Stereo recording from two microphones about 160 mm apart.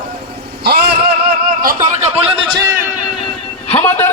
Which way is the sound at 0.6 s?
85° right.